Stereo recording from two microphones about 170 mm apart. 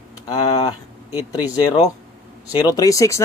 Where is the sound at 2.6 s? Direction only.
20° left (ahead or behind).